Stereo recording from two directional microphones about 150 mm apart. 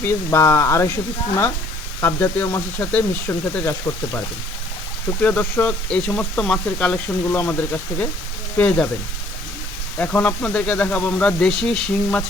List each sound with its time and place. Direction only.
0.0 s speech: 15° left (ahead or behind)
2.0 s speech: 20° left (ahead or behind)
5.2 s speech: 10° left (ahead or behind)
10.0 s speech: 10° left (ahead or behind)